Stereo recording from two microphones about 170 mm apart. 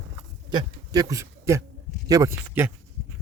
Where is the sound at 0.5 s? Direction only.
20° right (ahead or behind).